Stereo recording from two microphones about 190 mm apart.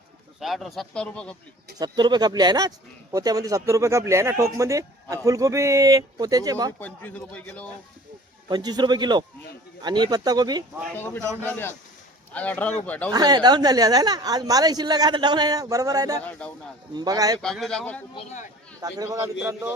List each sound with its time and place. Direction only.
0.3 s speech: centre (ahead or behind)
1.8 s speech: 20° right (ahead or behind)
6.7 s speech: 10° left (ahead or behind)
8.4 s speech: 20° right (ahead or behind)
10.9 s speech: 10° left (ahead or behind)
13.1 s speech: 20° right (ahead or behind)
17.4 s speech: centre (ahead or behind)
18.1 s speech: 35° left (ahead or behind)
18.8 s speech: 20° right (ahead or behind)